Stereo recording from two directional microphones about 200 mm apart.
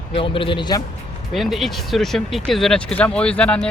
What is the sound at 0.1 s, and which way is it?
Speech, 25° left (ahead or behind).